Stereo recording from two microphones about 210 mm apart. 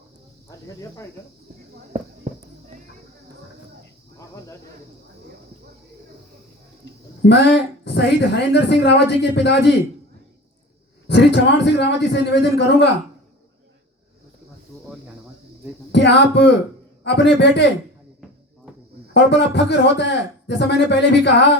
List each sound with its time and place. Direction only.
7.3 s a woman's voice: 55° left (ahead or behind)
11.1 s a woman's voice: 55° left (ahead or behind)
15.9 s a woman's voice: 55° left (ahead or behind)
19.1 s a woman's voice: 55° left (ahead or behind)